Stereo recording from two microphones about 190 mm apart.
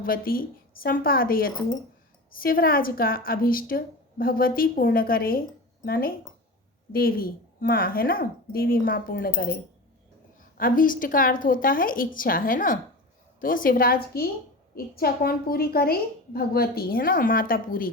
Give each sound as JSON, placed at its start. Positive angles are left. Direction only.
{"t": 0.0, "sound": "a woman's voice", "side_deg": 50}
{"t": 10.6, "sound": "a woman's voice", "side_deg": 45}